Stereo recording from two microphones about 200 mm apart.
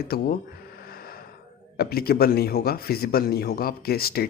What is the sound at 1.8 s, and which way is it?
Speech, 50° left (ahead or behind).